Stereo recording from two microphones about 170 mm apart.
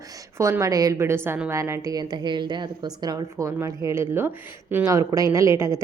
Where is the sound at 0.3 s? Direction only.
15° right (ahead or behind).